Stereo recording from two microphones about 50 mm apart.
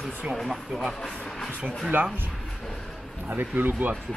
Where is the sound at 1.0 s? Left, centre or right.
Centre.